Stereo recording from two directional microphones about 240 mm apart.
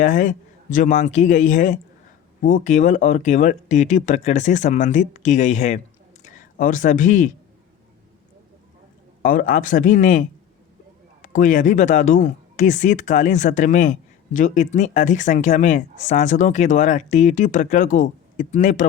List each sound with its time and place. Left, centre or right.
0.0 s speech: left
9.2 s speech: left